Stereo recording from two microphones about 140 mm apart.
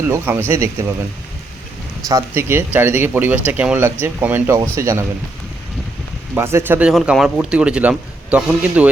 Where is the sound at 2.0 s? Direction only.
20° right (ahead or behind).